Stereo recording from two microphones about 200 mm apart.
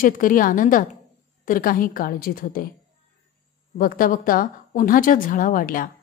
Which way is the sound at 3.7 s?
45° left (ahead or behind).